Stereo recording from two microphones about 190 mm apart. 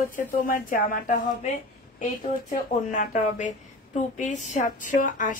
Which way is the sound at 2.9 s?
40° left (ahead or behind).